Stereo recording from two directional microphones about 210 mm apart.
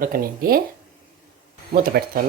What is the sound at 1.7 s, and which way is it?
Speech, 45° right (ahead or behind).